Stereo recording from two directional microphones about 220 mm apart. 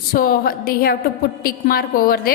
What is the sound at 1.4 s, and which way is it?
Speech, 40° left (ahead or behind).